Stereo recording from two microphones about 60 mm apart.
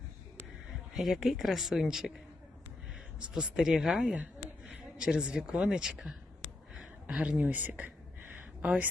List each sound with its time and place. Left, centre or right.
0.9 s speech: centre
3.2 s speech: centre
4.6 s speech: centre
7.2 s speech: right